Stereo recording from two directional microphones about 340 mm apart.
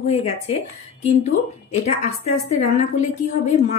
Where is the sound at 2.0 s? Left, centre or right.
Centre.